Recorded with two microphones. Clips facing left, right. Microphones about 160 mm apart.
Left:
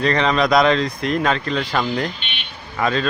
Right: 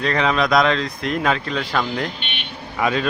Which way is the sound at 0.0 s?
5° right (ahead or behind).